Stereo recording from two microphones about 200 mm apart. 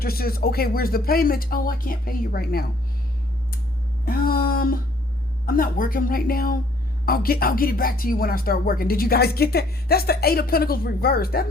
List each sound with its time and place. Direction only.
0.0 s speech: 50° left (ahead or behind)
4.0 s a sound: 45° left (ahead or behind)
5.5 s speech: 45° left (ahead or behind)